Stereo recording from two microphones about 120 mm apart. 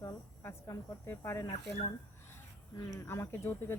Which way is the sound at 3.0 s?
20° left (ahead or behind).